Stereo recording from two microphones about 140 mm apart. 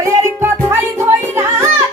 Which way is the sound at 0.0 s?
20° right (ahead or behind).